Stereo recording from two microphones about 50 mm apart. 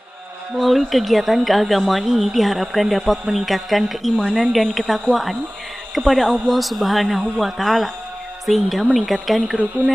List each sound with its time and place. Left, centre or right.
0.6 s speech: centre